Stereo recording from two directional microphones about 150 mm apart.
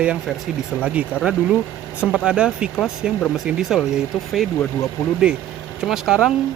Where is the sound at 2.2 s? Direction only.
5° right (ahead or behind).